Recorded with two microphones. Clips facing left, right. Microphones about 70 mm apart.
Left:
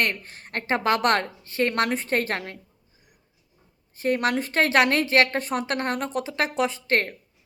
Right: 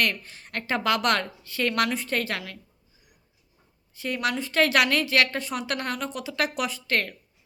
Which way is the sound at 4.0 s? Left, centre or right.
Left.